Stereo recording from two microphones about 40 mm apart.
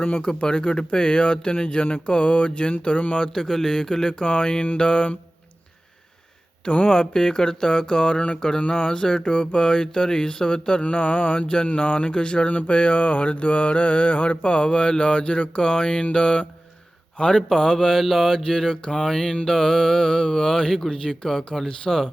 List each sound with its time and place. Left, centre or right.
0.0 s mantra: left
0.3 s speech: left
3.3 s mantra: centre
4.2 s speech: left
6.8 s speech: centre
12.5 s mantra: left
16.1 s speech: left
17.2 s mantra: left